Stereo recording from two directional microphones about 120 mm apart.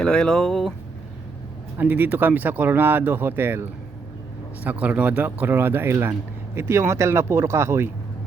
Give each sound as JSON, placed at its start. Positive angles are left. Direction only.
{"t": 0.0, "sound": "speech", "side_deg": 5}
{"t": 1.8, "sound": "speech", "side_deg": -15}